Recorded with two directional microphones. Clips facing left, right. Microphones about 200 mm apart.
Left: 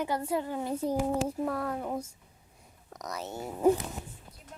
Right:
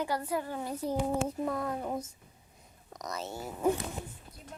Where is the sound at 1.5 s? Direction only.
15° right (ahead or behind).